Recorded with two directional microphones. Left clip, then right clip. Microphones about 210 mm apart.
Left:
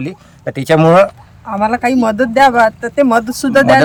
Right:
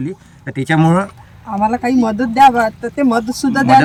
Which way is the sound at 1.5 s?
25° left (ahead or behind).